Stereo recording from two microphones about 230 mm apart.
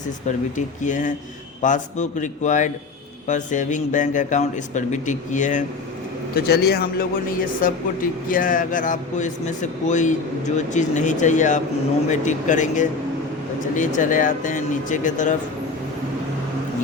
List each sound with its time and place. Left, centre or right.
0.3 s speech: left